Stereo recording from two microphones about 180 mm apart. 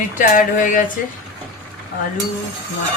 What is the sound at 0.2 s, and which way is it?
Music, 45° left (ahead or behind).